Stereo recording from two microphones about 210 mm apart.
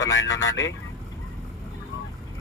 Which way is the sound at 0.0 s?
65° left (ahead or behind).